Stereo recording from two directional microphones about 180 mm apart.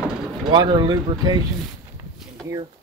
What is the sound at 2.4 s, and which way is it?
Speech, 20° right (ahead or behind).